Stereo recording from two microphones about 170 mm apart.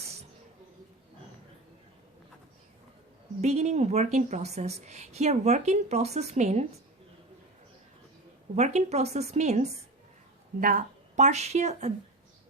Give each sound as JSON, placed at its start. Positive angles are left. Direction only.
{"t": 3.4, "sound": "a woman's voice", "side_deg": -40}
{"t": 8.5, "sound": "a woman's voice", "side_deg": -40}
{"t": 10.6, "sound": "a woman's voice", "side_deg": -50}